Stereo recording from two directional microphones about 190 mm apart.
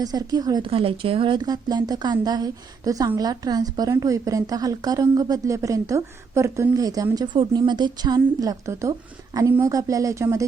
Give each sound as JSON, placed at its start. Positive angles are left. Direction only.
{"t": 0.0, "sound": "a woman's voice", "side_deg": -20}